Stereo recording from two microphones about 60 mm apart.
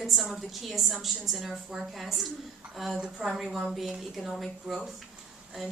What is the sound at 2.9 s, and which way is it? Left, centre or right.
A woman's voice, centre.